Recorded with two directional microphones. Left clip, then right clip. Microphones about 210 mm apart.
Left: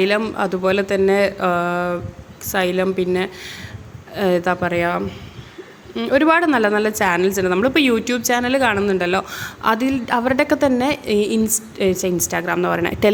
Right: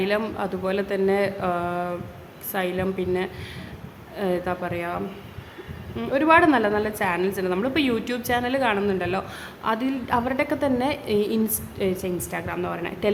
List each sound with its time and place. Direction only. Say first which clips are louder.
0.0 s a woman's voice: left 6 dB; 20° left (ahead or behind)